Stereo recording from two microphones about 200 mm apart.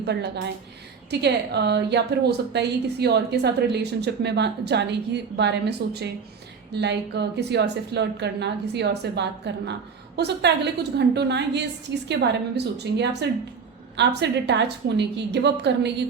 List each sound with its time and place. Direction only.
0.0 s a woman's voice: 55° right (ahead or behind)